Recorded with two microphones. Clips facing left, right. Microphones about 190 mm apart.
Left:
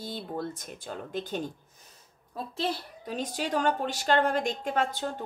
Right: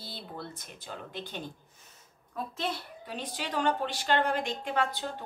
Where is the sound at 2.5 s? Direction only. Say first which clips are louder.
Left 5 dB; 35° left (ahead or behind).